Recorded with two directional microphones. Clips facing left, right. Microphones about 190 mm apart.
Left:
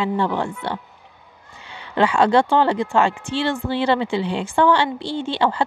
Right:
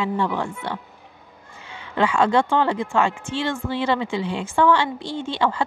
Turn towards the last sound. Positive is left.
turn(degrees=30)  # may be behind; listen again after turning